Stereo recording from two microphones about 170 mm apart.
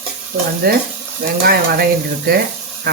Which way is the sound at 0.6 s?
60° right (ahead or behind).